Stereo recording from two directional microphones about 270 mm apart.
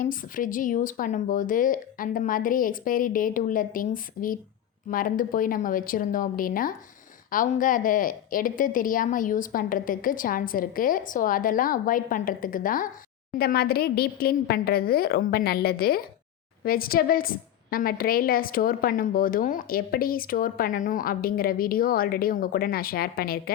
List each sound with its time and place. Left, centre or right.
0.0 s a woman's voice: left